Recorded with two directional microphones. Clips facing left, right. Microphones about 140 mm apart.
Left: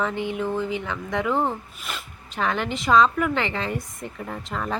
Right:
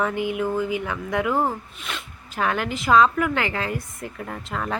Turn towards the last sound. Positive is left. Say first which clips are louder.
# even
turn(degrees=0)  # may be behind; listen again after turning